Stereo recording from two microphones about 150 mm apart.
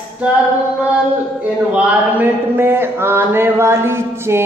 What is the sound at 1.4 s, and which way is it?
Speech, 10° right (ahead or behind).